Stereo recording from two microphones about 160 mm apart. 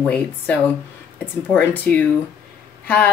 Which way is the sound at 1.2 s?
10° left (ahead or behind).